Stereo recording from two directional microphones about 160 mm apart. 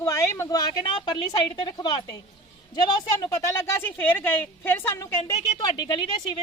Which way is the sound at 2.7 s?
20° left (ahead or behind).